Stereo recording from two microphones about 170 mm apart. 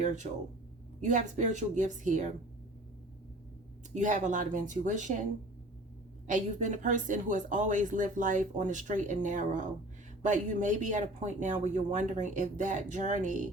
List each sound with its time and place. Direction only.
0.0 s speech: 45° right (ahead or behind)
3.9 s speech: 45° right (ahead or behind)
6.2 s speech: 45° right (ahead or behind)